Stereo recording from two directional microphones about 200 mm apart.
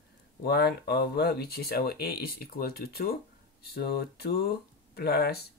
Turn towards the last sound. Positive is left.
turn(degrees=55)  # may be behind; listen again after turning